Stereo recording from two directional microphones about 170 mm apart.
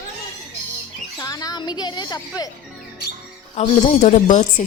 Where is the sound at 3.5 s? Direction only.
45° left (ahead or behind).